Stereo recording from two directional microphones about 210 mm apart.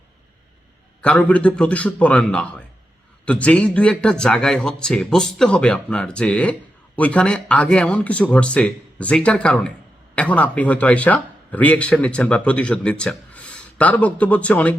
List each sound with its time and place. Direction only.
1.0 s a man's voice: 5° left (ahead or behind)